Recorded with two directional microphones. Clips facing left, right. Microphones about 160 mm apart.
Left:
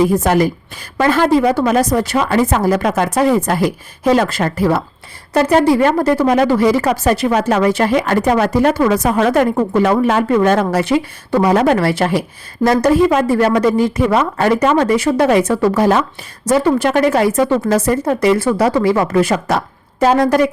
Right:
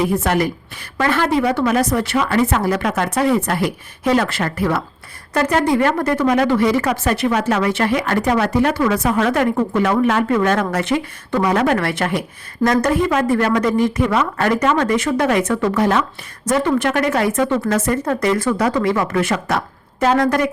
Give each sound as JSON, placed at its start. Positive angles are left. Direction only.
{"t": 0.2, "sound": "a woman's voice", "side_deg": 35}
{"t": 18.0, "sound": "a woman's voice", "side_deg": 25}